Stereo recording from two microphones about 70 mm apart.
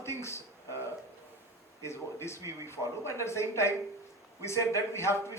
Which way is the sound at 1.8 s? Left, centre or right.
Left.